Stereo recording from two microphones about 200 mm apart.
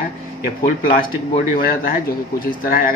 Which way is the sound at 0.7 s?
30° left (ahead or behind).